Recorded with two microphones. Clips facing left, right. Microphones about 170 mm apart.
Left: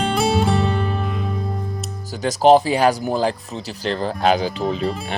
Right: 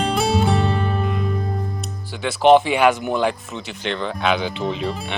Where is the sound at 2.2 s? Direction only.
40° left (ahead or behind).